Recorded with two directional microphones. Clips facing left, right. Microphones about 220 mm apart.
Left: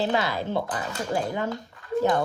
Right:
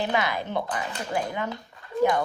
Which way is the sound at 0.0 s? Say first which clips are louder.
Left 1 dB; 20° right (ahead or behind).